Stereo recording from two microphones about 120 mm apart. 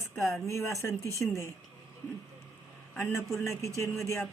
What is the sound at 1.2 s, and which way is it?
Speech, 10° left (ahead or behind).